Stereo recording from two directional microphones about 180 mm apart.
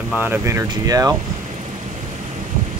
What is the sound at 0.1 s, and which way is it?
Speech, 10° right (ahead or behind).